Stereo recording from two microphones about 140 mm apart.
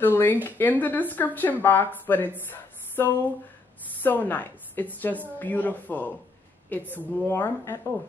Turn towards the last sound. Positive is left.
turn(degrees=15)  # may be behind; listen again after turning